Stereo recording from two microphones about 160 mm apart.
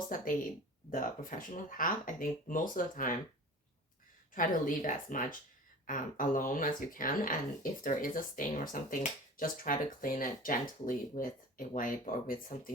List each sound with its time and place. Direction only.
0.1 s speech: 55° left (ahead or behind)
4.4 s speech: 55° left (ahead or behind)